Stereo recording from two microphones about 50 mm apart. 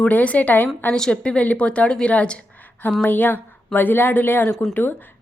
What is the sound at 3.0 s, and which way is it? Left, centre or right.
Speech, left.